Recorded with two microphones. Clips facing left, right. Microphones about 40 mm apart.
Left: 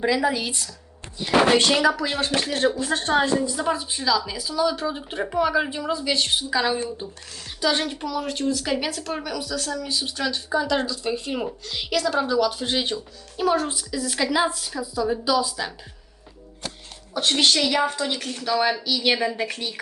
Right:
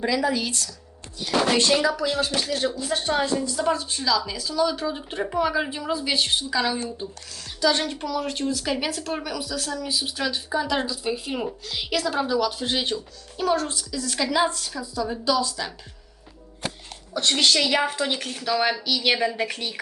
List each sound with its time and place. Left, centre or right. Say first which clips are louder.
0.0 s speech: left 1 dB; centre
1.9 s a woman's voice: left 1 dB; left
3.4 s speech: even; centre
6.5 s speech: left 2 dB; centre
7.9 s speech: even; centre
17.2 s speech: left 1 dB; centre
17.7 s a woman's voice: even; centre